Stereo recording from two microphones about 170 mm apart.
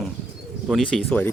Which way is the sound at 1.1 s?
10° left (ahead or behind).